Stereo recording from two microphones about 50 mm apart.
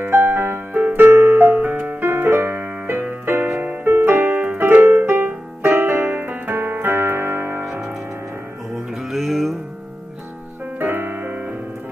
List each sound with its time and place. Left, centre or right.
0.1 s music: right
4.4 s piano: right
8.7 s music: centre
10.8 s music: right